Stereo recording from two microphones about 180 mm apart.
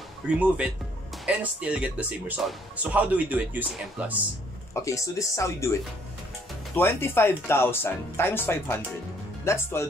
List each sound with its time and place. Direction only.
0.3 s speech: 5° right (ahead or behind)
4.8 s speech: 15° left (ahead or behind)